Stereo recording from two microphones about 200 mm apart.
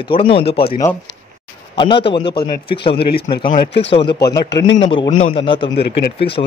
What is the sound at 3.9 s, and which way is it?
Speech, 25° left (ahead or behind).